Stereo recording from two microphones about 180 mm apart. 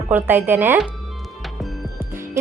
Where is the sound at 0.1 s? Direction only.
10° right (ahead or behind).